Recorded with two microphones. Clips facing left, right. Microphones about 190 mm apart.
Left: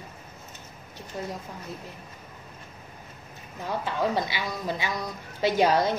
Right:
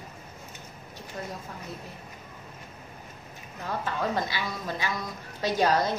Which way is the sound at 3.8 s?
15° left (ahead or behind).